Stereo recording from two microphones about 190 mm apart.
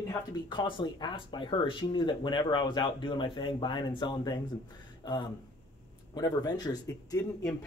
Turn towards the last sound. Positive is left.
turn(degrees=15)  # may be behind; listen again after turning